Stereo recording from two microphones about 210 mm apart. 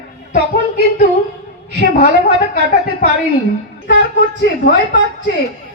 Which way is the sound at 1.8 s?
40° left (ahead or behind).